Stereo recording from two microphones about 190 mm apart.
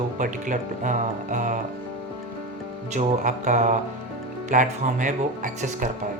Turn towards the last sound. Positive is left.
turn(degrees=-40)  # may be behind; listen again after turning